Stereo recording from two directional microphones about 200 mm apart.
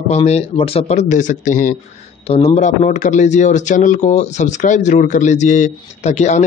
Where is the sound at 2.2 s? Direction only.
30° left (ahead or behind).